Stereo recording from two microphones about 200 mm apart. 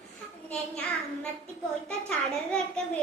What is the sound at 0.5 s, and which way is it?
A child's voice, 5° left (ahead or behind).